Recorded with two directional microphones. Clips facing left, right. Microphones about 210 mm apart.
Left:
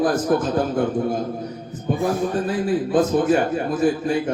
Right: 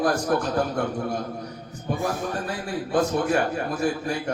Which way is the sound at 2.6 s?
20° left (ahead or behind).